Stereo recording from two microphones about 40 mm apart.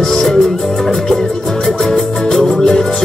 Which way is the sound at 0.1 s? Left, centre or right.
Centre.